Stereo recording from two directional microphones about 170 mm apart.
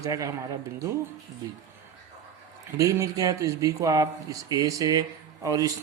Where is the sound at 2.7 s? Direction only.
20° right (ahead or behind).